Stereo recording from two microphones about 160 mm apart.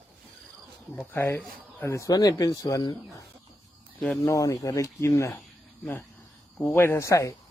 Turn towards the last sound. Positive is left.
turn(degrees=20)  # may be behind; listen again after turning